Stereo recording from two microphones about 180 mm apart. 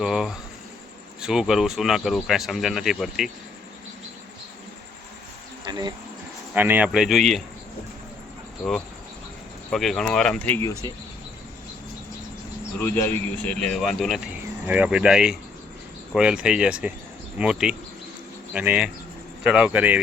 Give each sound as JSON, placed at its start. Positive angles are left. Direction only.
{"t": 0.0, "sound": "speech", "side_deg": 0}
{"t": 5.7, "sound": "insect", "side_deg": -20}
{"t": 6.5, "sound": "speech", "side_deg": -10}
{"t": 9.6, "sound": "speech", "side_deg": 0}
{"t": 12.8, "sound": "speech", "side_deg": 10}